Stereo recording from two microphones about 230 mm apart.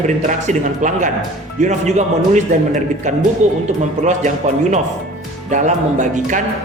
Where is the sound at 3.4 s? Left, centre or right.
Right.